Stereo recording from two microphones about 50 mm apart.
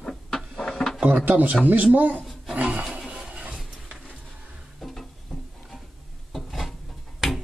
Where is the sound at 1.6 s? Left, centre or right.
Right.